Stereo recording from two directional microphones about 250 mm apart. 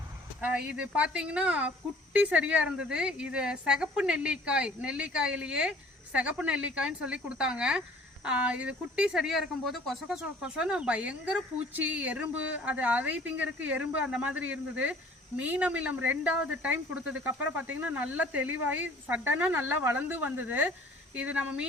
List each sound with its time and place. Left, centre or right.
0.7 s speech: centre